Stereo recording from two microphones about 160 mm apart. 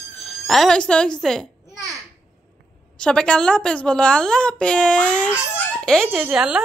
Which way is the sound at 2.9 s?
5° left (ahead or behind).